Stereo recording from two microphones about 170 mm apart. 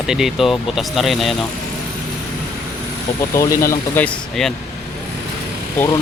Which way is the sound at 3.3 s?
20° left (ahead or behind).